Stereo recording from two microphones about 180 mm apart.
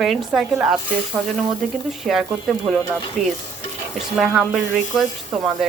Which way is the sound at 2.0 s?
Centre (ahead or behind).